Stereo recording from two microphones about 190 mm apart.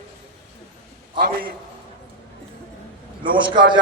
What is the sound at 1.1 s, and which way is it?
Speech, 50° right (ahead or behind).